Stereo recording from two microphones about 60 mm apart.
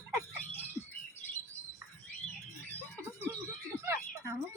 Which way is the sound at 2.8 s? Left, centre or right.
Left.